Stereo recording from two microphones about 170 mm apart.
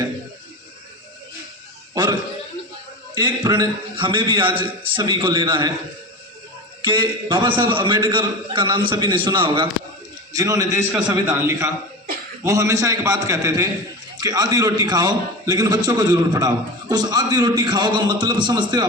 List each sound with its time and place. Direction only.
3.2 s a man's voice: 25° right (ahead or behind)
4.4 s a man's voice: 10° right (ahead or behind)
4.8 s a man's voice: 25° right (ahead or behind)
6.8 s a man's voice: 30° right (ahead or behind)